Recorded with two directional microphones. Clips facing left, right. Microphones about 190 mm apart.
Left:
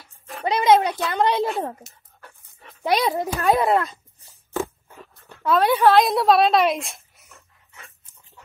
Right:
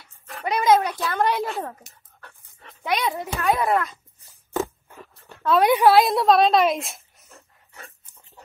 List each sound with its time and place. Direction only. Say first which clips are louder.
0.3 s a sound: left 2 dB; 20° left (ahead or behind)
0.6 s a child's voice: left 2 dB; 25° left (ahead or behind)
2.8 s a child's voice: left 4 dB; 35° left (ahead or behind)
5.6 s a woman's voice: right 1 dB; 15° right (ahead or behind)
5.9 s a woman's voice: even; centre (ahead or behind)
7.2 s dog: right 2 dB; 35° right (ahead or behind)